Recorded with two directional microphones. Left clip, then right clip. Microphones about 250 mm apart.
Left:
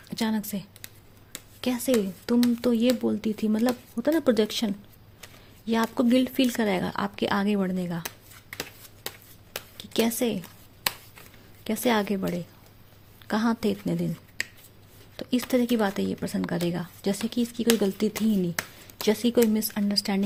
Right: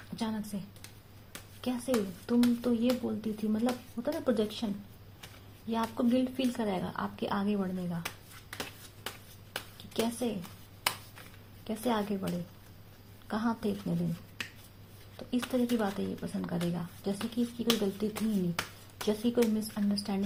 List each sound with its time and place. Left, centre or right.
1.3 s speech: left
9.0 s a sound: left
11.6 s speech: left
15.1 s speech: left